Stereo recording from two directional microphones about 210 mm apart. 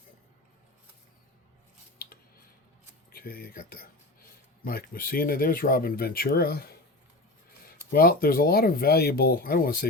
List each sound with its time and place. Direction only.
3.1 s speech: 45° left (ahead or behind)
7.9 s speech: 45° left (ahead or behind)